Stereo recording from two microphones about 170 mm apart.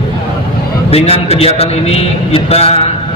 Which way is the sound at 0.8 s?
35° left (ahead or behind).